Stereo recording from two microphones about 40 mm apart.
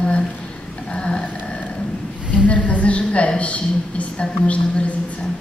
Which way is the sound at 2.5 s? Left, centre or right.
Left.